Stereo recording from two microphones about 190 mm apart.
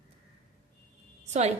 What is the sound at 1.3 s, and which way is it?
Speech, 35° right (ahead or behind).